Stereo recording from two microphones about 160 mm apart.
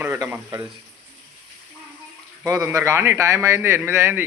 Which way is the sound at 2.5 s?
20° right (ahead or behind).